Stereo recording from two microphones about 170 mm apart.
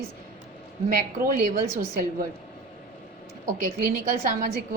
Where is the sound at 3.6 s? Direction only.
55° right (ahead or behind).